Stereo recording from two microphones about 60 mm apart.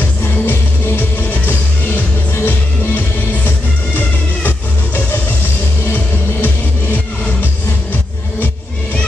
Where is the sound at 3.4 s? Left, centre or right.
Left.